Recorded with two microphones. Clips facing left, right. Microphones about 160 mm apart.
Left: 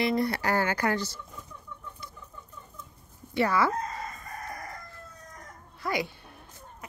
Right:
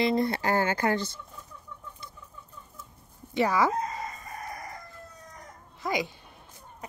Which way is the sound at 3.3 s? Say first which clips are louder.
Right 1 dB; 15° right (ahead or behind).